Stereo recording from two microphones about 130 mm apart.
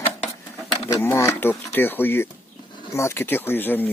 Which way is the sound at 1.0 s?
20° left (ahead or behind).